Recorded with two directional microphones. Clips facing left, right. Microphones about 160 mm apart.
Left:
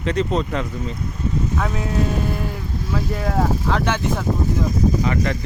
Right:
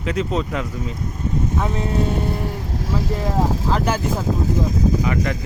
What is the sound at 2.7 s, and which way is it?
Vehicle, 90° right.